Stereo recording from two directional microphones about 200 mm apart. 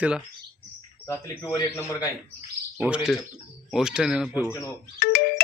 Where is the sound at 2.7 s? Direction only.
5° right (ahead or behind).